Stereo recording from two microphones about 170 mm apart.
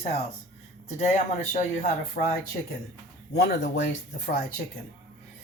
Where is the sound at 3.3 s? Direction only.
85° left.